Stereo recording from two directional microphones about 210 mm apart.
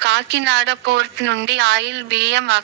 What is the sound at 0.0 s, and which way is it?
A woman's voice, 55° right (ahead or behind).